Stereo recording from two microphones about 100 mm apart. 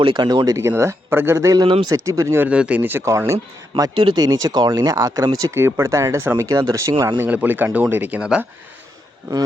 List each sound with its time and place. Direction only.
0.0 s speech: 50° right (ahead or behind); by 2.5 s 25° right (ahead or behind)
2.5 s speech: 10° right (ahead or behind); by 3.3 s 30° right (ahead or behind)
4.1 s speech: 45° right (ahead or behind)
7.2 s speech: 15° right (ahead or behind)